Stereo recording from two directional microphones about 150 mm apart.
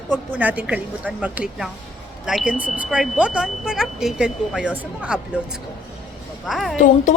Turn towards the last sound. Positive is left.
turn(degrees=60)  # may be behind; listen again after turning